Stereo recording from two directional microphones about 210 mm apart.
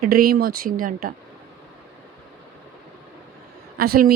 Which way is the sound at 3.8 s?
45° right (ahead or behind).